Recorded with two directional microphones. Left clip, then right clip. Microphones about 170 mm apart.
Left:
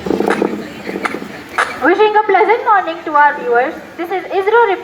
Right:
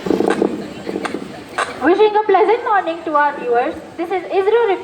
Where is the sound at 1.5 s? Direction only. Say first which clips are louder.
Left 3 dB; 30° right (ahead or behind).